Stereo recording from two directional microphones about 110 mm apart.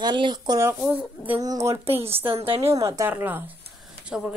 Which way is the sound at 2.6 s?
30° right (ahead or behind).